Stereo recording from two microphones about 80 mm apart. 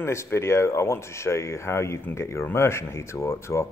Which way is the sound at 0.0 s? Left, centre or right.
Left.